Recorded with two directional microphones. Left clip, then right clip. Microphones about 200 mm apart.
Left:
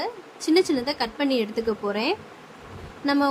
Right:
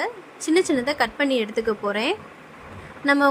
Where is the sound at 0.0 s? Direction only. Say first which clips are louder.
Right 2 dB; 15° right (ahead or behind).